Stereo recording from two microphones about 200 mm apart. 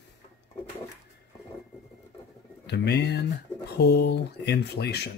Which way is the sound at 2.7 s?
55° left (ahead or behind).